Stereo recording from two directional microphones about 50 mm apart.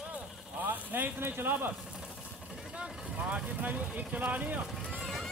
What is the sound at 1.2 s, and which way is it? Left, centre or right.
Speech, right.